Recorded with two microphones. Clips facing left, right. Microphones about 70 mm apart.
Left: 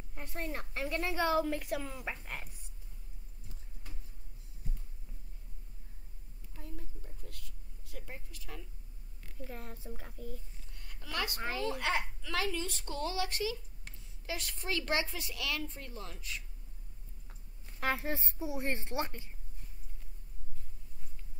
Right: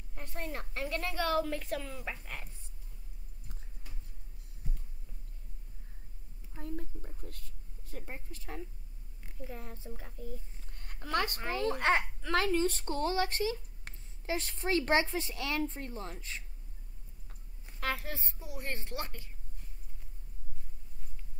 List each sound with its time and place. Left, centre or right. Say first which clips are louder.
0.1 s a woman's voice: even; centre
6.6 s a sound: right 8 dB; right
9.5 s speech: even; centre
10.6 s a sound: right 5 dB; right
11.5 s a child's voice: right 6 dB; right
17.7 s a woman's voice: left 2 dB; left